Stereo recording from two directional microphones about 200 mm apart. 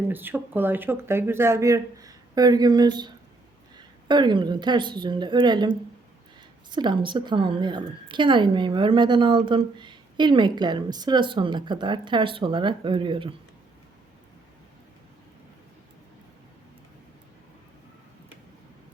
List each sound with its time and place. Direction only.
0.1 s a woman's voice: 10° right (ahead or behind)